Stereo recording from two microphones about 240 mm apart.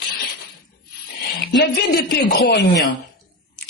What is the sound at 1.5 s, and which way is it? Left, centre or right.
Speech, left.